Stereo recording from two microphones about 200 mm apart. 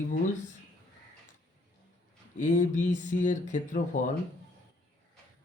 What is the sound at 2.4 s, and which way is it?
Speech, 40° left (ahead or behind).